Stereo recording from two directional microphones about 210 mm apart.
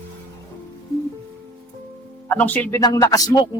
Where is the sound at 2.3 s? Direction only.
10° left (ahead or behind).